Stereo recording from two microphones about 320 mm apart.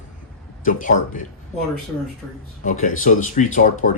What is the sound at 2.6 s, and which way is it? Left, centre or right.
Speech, left.